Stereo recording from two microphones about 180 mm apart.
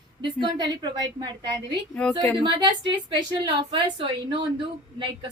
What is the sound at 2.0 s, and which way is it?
Speech, 5° left (ahead or behind).